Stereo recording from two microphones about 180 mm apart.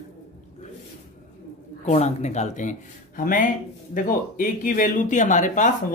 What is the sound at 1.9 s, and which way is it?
Speech, 40° left (ahead or behind).